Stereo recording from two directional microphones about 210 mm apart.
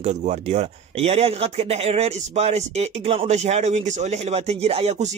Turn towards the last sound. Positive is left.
turn(degrees=-30)  # may be behind; listen again after turning